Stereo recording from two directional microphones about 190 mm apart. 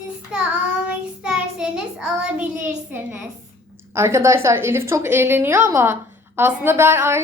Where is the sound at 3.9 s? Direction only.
15° right (ahead or behind).